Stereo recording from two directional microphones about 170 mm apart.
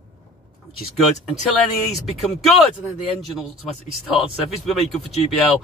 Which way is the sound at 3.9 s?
Centre (ahead or behind).